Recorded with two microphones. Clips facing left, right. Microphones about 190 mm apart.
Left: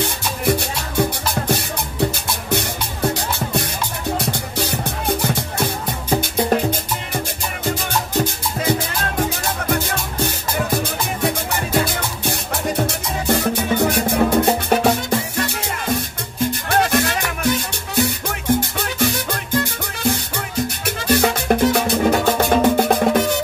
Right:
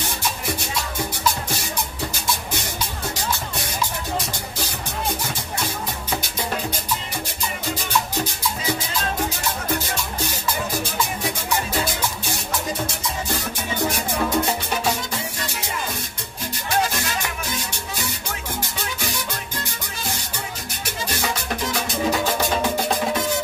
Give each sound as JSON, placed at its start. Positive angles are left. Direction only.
{"t": 0.0, "sound": "music", "side_deg": 60}
{"t": 9.7, "sound": "music", "side_deg": 55}
{"t": 16.6, "sound": "music", "side_deg": 60}